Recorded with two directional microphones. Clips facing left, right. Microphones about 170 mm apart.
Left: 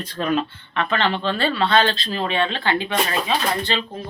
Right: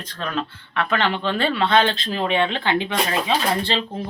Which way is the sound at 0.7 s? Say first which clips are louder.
Even; 5° right (ahead or behind).